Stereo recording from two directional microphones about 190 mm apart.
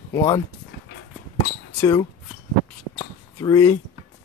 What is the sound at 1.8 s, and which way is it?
Speech, 25° left (ahead or behind).